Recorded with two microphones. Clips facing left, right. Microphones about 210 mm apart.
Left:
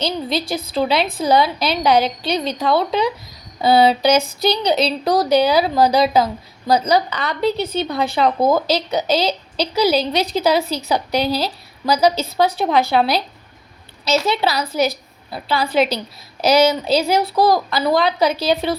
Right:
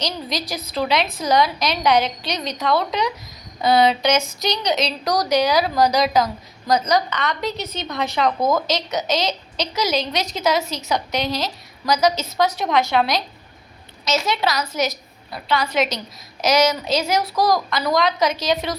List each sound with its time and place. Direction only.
0.0 s a woman's voice: 30° left (ahead or behind)